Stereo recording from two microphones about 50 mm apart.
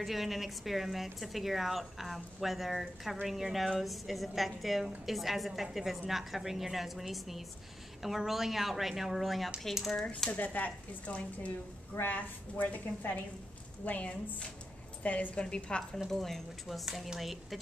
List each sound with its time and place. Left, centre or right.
0.0 s a woman's voice: centre
9.9 s speech: centre
10.3 s a woman's voice: left
16.1 s a woman's voice: centre